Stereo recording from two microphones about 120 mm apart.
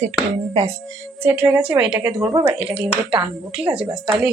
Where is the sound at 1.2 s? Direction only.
15° right (ahead or behind).